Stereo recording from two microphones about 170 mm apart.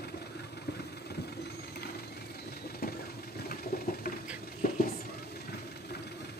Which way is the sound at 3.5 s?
60° left (ahead or behind).